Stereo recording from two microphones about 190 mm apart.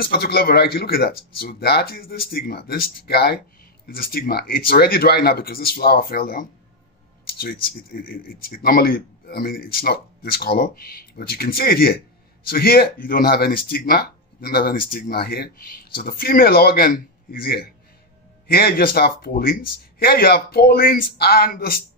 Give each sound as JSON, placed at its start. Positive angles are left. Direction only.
{"t": 0.0, "sound": "speech", "side_deg": 55}
{"t": 7.2, "sound": "a sound", "side_deg": 50}
{"t": 7.9, "sound": "speech", "side_deg": 50}